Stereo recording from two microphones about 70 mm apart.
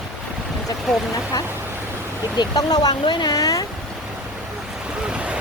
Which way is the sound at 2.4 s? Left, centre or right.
Left.